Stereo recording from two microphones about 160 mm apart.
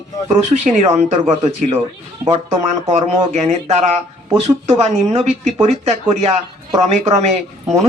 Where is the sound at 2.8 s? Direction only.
45° right (ahead or behind).